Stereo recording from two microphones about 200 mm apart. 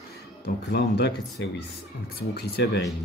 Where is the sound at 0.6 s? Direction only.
55° left (ahead or behind).